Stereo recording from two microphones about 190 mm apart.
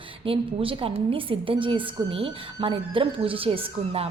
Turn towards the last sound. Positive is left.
turn(degrees=-30)  # may be behind; listen again after turning